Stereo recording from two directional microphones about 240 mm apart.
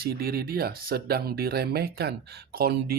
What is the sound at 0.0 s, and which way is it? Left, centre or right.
Speech, right.